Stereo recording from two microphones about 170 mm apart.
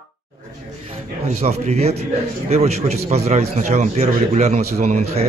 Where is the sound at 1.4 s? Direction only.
40° right (ahead or behind).